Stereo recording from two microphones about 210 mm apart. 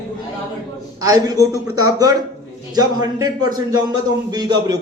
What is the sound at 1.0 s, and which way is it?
A man's voice, 15° right (ahead or behind).